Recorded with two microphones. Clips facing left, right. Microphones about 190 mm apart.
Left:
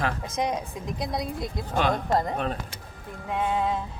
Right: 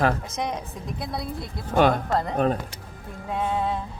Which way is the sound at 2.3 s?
40° right (ahead or behind).